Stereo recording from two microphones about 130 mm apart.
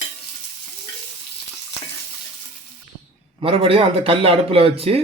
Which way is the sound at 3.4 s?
45° right (ahead or behind).